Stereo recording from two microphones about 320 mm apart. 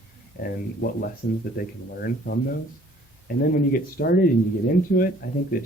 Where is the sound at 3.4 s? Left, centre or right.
Left.